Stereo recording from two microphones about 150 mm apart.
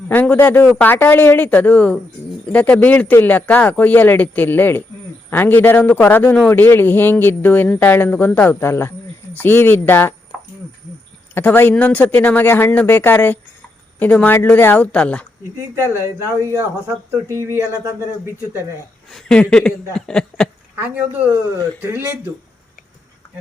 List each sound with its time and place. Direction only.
0.1 s speech: 10° left (ahead or behind)
11.3 s speech: 15° left (ahead or behind)
15.7 s speech: 15° right (ahead or behind)
19.1 s speech: 5° left (ahead or behind)
20.8 s speech: 10° right (ahead or behind)